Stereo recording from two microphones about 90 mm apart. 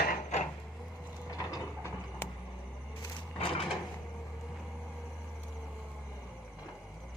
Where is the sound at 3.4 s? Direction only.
90° left.